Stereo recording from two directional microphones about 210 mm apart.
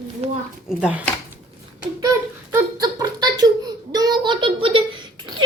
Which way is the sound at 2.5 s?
20° right (ahead or behind).